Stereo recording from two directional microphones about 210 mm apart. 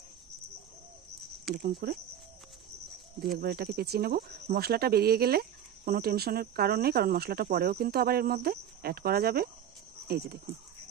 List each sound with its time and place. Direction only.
1.5 s speech: 45° right (ahead or behind)
3.2 s speech: 45° right (ahead or behind)